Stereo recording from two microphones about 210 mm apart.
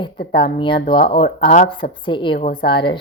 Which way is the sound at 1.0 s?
25° left (ahead or behind).